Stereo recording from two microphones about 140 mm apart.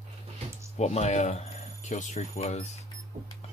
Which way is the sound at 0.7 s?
55° left (ahead or behind).